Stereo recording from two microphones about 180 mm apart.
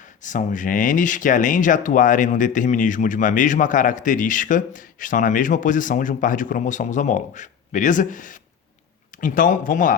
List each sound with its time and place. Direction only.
0.2 s speech: 45° left (ahead or behind)